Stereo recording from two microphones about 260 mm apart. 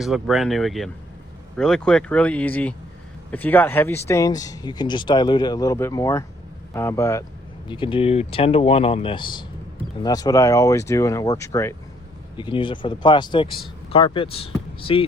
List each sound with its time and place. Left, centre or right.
0.0 s speech: centre; by 15.0 s left